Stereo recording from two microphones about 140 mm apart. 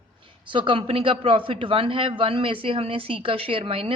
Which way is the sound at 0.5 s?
40° right (ahead or behind).